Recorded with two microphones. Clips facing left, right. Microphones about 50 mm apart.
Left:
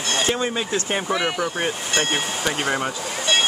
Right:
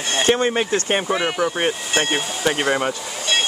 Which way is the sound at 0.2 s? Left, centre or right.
Right.